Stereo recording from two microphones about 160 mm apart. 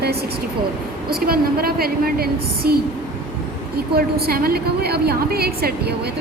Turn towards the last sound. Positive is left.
turn(degrees=-75)  # may be behind; listen again after turning